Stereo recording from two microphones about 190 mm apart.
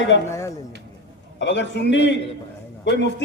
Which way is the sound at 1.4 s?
70° left (ahead or behind).